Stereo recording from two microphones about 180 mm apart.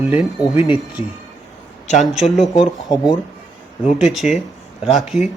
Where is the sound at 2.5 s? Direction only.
25° left (ahead or behind).